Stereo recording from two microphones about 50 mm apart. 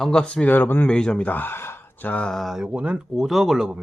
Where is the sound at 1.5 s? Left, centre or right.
Left.